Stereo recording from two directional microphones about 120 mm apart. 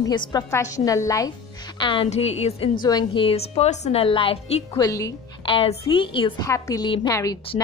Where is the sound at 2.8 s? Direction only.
35° left (ahead or behind); by 4.6 s 55° left (ahead or behind).